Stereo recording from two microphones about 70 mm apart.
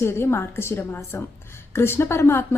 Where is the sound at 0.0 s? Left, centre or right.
Left.